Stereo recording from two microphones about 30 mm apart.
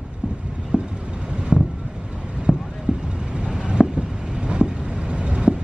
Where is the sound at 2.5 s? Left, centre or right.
Centre.